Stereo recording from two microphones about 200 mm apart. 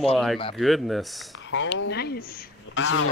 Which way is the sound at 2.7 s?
70° left (ahead or behind).